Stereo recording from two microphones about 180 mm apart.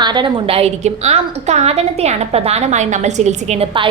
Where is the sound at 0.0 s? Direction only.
25° right (ahead or behind).